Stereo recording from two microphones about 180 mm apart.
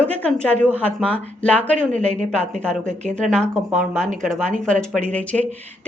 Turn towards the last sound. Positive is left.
turn(degrees=5)  # may be behind; listen again after turning